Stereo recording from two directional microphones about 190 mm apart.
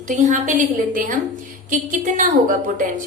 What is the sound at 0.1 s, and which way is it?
A woman's voice, 40° right (ahead or behind).